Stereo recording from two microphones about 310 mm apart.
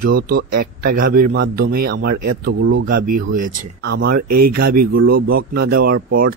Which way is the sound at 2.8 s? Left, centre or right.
Right.